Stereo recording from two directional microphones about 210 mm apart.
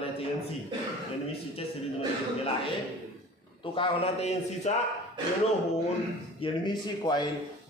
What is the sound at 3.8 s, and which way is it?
Speech, 25° left (ahead or behind).